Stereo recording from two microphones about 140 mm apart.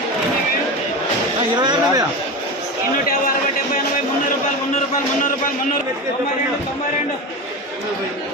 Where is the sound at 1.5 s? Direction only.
30° right (ahead or behind).